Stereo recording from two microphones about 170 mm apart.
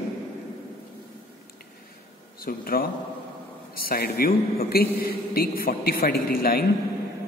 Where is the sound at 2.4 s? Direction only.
60° left (ahead or behind).